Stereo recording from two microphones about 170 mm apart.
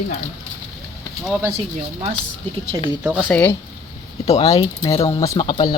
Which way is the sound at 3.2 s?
10° left (ahead or behind).